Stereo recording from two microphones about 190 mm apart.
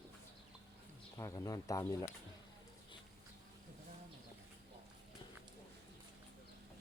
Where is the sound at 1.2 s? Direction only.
15° left (ahead or behind).